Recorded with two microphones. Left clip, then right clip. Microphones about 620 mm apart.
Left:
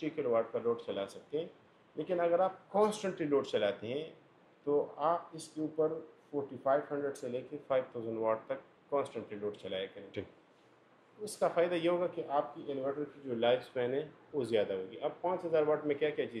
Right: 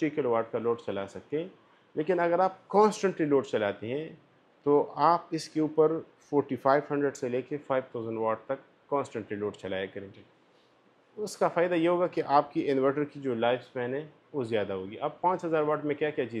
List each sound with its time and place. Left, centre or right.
0.0 s speech: right
11.2 s speech: right
12.3 s speech: right
13.4 s speech: right